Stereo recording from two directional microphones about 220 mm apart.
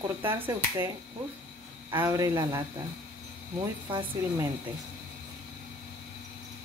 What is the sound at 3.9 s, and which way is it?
Speech, 20° right (ahead or behind).